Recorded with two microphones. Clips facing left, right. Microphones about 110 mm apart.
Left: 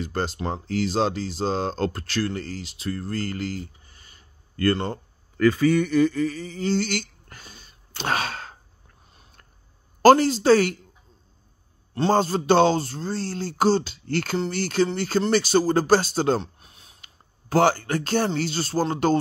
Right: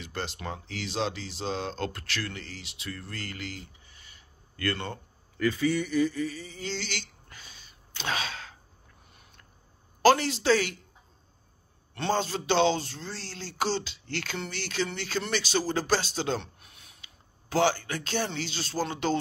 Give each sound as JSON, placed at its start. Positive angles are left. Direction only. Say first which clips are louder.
{"t": 0.0, "sound": "speech", "louder": "left 8 dB", "side_deg": 40}
{"t": 5.5, "sound": "speech", "louder": "left 6 dB", "side_deg": 55}
{"t": 10.0, "sound": "speech", "louder": "left 7 dB", "side_deg": 40}
{"t": 11.9, "sound": "speech", "louder": "left 8 dB", "side_deg": 40}
{"t": 17.0, "sound": "a man's voice", "louder": "left 2 dB", "side_deg": 45}